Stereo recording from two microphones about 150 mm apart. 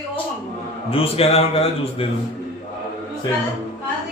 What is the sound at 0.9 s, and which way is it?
A man's voice, 40° left (ahead or behind).